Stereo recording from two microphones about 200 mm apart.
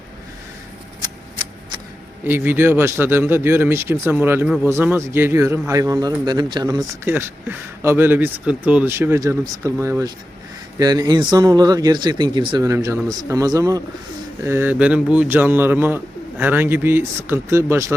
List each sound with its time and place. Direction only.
1.0 s shuffling cards: 20° right (ahead or behind)
2.2 s a man's voice: 10° right (ahead or behind)